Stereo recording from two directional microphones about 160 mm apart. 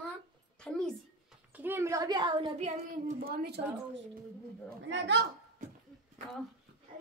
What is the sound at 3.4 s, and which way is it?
Speech, 90° right.